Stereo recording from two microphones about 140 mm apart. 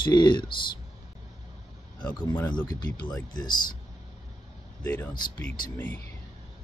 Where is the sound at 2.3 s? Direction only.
10° left (ahead or behind).